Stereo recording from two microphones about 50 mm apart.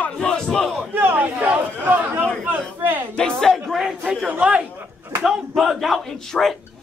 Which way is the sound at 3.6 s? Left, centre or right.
Centre.